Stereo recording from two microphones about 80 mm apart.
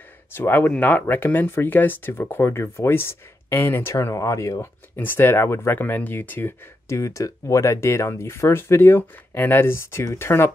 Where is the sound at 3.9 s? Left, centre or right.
Left.